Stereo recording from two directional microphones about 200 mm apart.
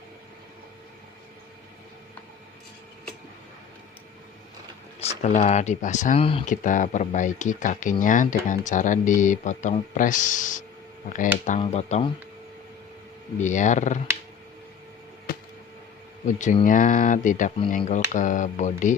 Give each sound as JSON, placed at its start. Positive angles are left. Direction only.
{"t": 4.9, "sound": "speech", "side_deg": 35}
{"t": 6.5, "sound": "speech", "side_deg": 40}
{"t": 11.6, "sound": "speech", "side_deg": 35}
{"t": 13.4, "sound": "speech", "side_deg": 40}
{"t": 15.3, "sound": "a sound", "side_deg": 50}
{"t": 16.2, "sound": "speech", "side_deg": 40}